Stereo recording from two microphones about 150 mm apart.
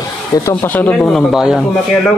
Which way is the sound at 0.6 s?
10° left (ahead or behind).